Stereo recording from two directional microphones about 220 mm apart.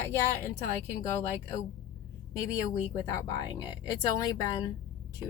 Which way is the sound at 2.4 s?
15° left (ahead or behind).